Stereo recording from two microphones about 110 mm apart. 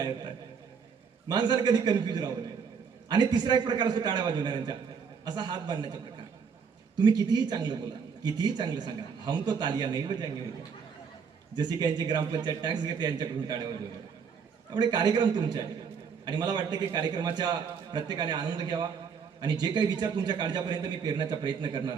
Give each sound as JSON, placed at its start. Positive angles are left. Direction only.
{"t": 0.0, "sound": "a man's voice", "side_deg": -45}
{"t": 11.5, "sound": "a man's voice", "side_deg": -40}
{"t": 14.7, "sound": "a man's voice", "side_deg": -45}